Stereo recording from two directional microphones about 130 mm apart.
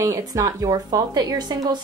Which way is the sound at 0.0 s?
25° right (ahead or behind).